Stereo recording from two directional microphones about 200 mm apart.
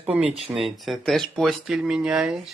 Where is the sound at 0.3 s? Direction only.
30° right (ahead or behind).